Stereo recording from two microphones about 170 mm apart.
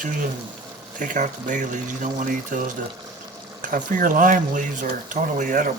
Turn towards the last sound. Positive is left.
turn(degrees=-50)  # may be behind; listen again after turning